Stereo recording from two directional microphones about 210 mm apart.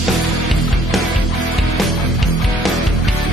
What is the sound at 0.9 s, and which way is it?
Music, centre (ahead or behind).